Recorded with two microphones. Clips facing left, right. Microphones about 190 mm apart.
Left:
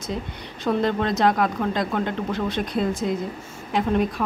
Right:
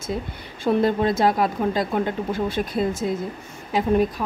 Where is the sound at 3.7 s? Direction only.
5° right (ahead or behind).